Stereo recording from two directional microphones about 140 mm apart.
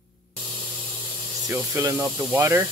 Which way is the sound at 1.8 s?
20° right (ahead or behind).